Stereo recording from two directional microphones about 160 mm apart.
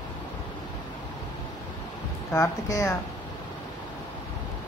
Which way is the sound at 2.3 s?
15° left (ahead or behind).